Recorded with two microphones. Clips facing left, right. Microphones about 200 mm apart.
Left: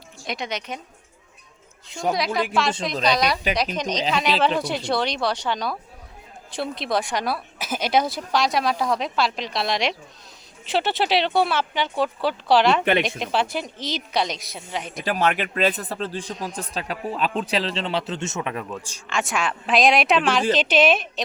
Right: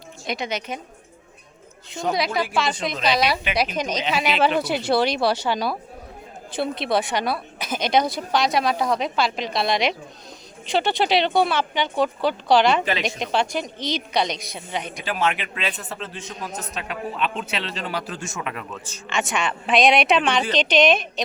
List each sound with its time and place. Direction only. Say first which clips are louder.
0.3 s a woman's voice: right 2 dB; centre (ahead or behind)
2.0 s a woman's voice: even; centre (ahead or behind)
15.0 s speech: left 3 dB; 40° left (ahead or behind); by 18.8 s 25° left (ahead or behind)
19.1 s a woman's voice: even; centre (ahead or behind)